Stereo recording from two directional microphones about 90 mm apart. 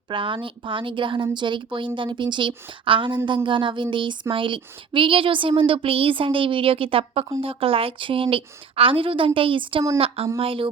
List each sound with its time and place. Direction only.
0.1 s a woman's voice: 65° right (ahead or behind)
10.3 s speech: 90° right